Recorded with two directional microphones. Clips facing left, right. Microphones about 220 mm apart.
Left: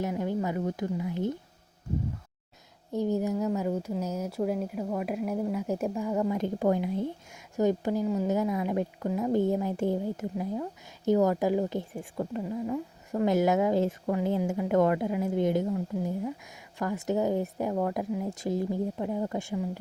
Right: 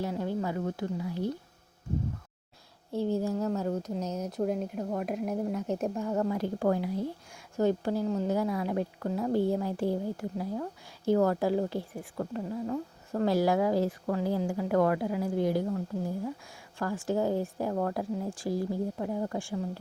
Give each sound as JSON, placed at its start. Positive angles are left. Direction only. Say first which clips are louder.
{"t": 0.0, "sound": "speech", "louder": "left 2 dB", "side_deg": 15}
{"t": 2.9, "sound": "a woman's voice", "louder": "left 1 dB", "side_deg": 15}